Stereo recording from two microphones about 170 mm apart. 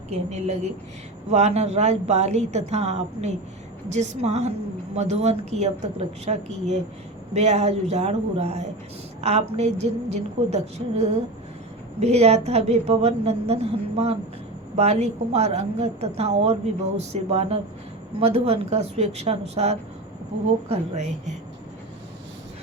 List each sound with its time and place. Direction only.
0.1 s a woman's voice: 40° right (ahead or behind)